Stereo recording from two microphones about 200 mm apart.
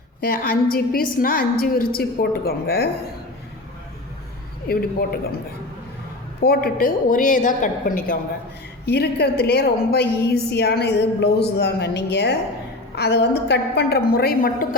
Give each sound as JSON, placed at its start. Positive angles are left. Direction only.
{"t": 0.2, "sound": "a woman's voice", "side_deg": 50}
{"t": 4.7, "sound": "a woman's voice", "side_deg": 50}
{"t": 6.4, "sound": "a woman's voice", "side_deg": 50}